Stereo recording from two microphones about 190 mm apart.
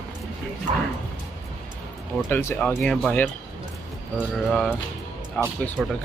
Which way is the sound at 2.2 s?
10° left (ahead or behind).